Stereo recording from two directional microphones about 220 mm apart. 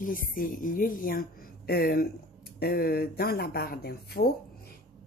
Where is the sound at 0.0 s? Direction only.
40° left (ahead or behind).